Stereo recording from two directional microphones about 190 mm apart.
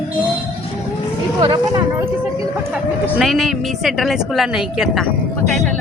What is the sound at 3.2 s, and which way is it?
A woman's voice, centre (ahead or behind).